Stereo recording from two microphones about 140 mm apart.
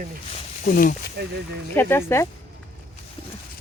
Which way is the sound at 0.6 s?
85° left.